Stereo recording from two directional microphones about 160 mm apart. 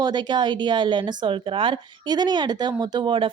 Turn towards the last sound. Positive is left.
turn(degrees=-30)  # may be behind; listen again after turning